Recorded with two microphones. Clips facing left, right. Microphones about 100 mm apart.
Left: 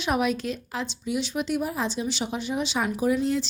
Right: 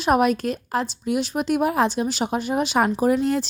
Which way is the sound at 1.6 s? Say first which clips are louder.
Right 7 dB; 65° right (ahead or behind).